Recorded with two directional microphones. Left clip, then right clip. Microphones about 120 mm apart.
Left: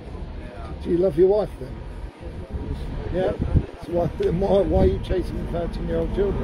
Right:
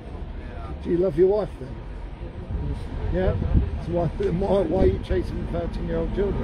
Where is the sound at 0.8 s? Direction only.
55° right (ahead or behind).